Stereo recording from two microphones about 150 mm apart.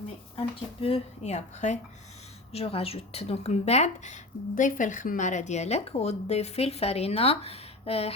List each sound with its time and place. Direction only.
0.3 s speech: 40° left (ahead or behind)